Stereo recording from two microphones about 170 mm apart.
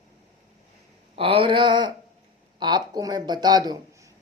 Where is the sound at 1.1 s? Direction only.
35° right (ahead or behind).